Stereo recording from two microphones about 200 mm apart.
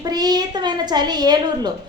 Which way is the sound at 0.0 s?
20° right (ahead or behind).